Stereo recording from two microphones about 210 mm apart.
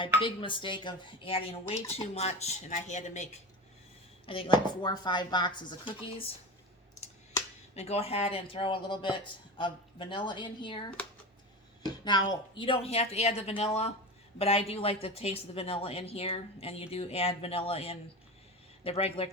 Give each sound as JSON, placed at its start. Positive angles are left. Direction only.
{"t": 0.0, "sound": "speech", "side_deg": 25}
{"t": 7.8, "sound": "speech", "side_deg": 30}
{"t": 12.3, "sound": "speech", "side_deg": 25}